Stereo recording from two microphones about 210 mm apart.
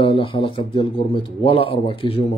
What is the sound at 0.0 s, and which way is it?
A man's voice, 25° left (ahead or behind).